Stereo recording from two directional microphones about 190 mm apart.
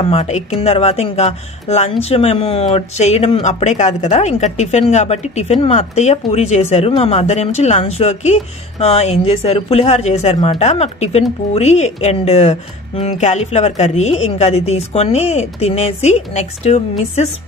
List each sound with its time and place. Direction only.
0.0 s speech: 35° left (ahead or behind)